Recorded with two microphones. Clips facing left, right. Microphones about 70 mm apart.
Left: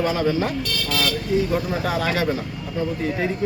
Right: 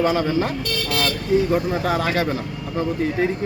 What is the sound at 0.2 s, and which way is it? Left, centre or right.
Speech, right.